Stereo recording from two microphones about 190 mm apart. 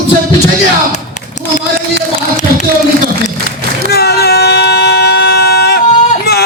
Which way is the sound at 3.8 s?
55° left (ahead or behind).